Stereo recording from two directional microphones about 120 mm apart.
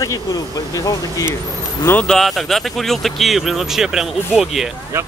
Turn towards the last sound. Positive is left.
turn(degrees=-5)  # may be behind; listen again after turning